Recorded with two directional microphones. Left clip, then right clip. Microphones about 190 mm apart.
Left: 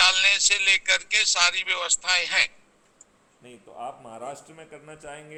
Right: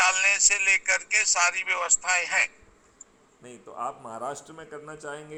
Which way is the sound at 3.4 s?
10° right (ahead or behind).